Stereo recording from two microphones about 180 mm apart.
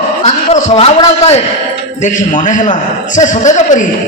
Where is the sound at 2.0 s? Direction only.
45° left (ahead or behind).